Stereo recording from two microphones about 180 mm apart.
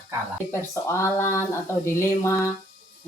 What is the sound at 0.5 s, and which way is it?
Speech, 15° left (ahead or behind).